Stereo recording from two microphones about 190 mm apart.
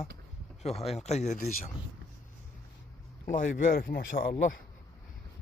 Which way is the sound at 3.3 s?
40° left (ahead or behind).